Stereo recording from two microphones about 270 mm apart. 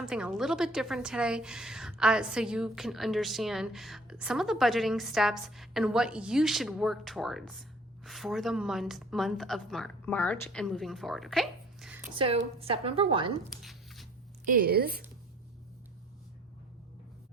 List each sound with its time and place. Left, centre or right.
0.0 s a woman's voice: centre
12.1 s a woman's voice: centre
13.5 s a sound: centre
14.5 s speech: right